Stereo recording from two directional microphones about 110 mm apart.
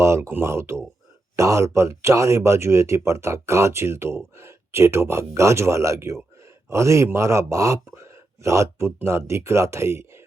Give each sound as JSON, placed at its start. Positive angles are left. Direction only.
{"t": 0.0, "sound": "speech", "side_deg": -25}